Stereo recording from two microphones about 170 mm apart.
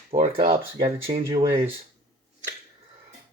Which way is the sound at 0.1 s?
35° right (ahead or behind).